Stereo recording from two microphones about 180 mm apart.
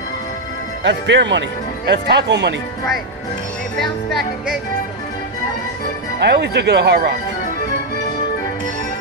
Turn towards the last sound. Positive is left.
turn(degrees=-65)  # may be behind; listen again after turning